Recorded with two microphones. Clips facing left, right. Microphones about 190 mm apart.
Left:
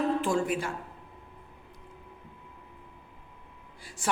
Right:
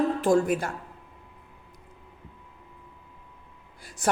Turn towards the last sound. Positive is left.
turn(degrees=-40)  # may be behind; listen again after turning